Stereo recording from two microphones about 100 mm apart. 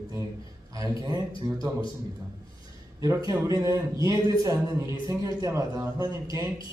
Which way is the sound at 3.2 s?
35° right (ahead or behind).